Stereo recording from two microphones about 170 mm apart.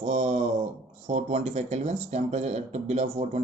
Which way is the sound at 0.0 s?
35° right (ahead or behind).